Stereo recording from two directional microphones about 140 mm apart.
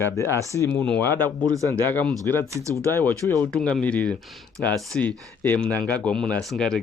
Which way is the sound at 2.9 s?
15° left (ahead or behind).